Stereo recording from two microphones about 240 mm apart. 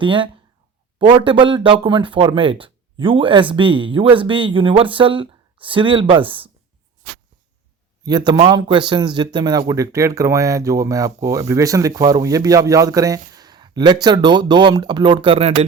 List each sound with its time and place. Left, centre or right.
0.0 s speech: right
8.0 s a man's voice: centre